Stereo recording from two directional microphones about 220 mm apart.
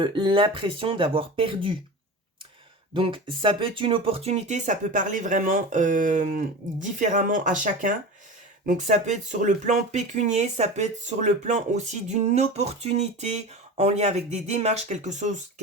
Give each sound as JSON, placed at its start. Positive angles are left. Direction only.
{"t": 0.0, "sound": "speech", "side_deg": -20}
{"t": 2.9, "sound": "speech", "side_deg": -20}